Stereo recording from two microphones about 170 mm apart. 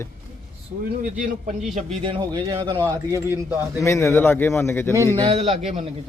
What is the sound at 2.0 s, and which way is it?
Speech, 30° right (ahead or behind).